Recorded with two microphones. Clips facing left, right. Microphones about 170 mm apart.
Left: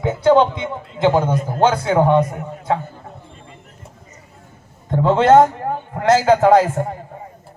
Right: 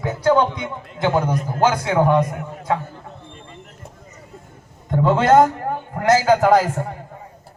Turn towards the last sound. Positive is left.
turn(degrees=25)  # may be behind; listen again after turning